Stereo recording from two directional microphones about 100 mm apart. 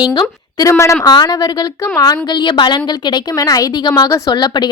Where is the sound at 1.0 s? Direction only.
45° left (ahead or behind).